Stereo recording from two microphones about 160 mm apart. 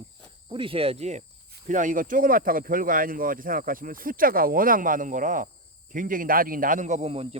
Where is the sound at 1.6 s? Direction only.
55° right (ahead or behind).